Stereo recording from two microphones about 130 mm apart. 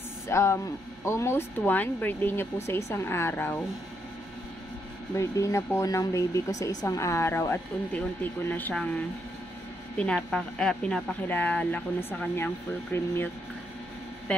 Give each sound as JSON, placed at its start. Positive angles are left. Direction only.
{"t": 0.3, "sound": "speech", "side_deg": 20}
{"t": 5.1, "sound": "a woman's voice", "side_deg": 25}